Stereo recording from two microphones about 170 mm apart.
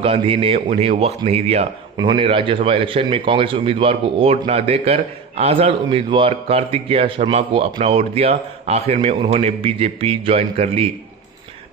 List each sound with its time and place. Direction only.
0.0 s a man's voice: 35° right (ahead or behind)